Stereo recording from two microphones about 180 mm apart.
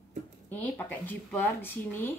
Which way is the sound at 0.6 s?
10° left (ahead or behind).